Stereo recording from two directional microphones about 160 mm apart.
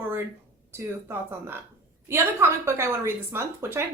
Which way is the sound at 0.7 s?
15° right (ahead or behind).